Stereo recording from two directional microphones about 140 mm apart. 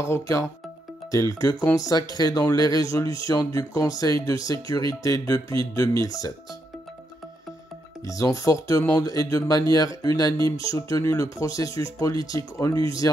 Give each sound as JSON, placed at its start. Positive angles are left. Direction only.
{"t": 0.0, "sound": "speech", "side_deg": 20}
{"t": 8.0, "sound": "speech", "side_deg": 25}